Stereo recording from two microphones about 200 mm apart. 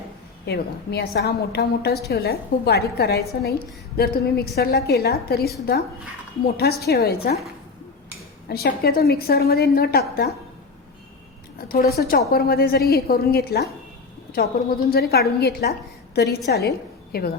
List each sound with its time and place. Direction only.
0.4 s a woman's voice: 55° left (ahead or behind)
8.4 s a woman's voice: 50° left (ahead or behind)
11.5 s a woman's voice: 50° left (ahead or behind)